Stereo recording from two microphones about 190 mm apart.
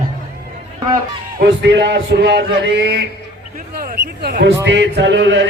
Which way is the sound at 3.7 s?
50° right (ahead or behind).